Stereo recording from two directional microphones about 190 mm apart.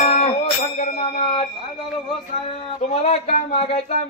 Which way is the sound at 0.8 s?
35° left (ahead or behind).